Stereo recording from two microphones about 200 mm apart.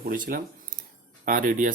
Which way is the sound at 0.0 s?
45° right (ahead or behind).